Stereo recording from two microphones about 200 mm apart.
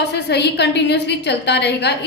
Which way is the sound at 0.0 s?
60° left (ahead or behind).